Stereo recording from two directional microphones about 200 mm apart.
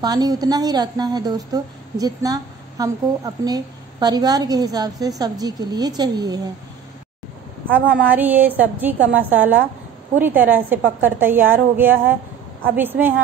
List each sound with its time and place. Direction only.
0.0 s a woman's voice: 20° right (ahead or behind)
7.7 s a woman's voice: 10° right (ahead or behind)